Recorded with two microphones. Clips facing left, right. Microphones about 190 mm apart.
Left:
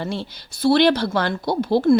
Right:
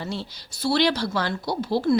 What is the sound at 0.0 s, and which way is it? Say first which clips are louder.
Speech: left 4 dB; 55° left (ahead or behind).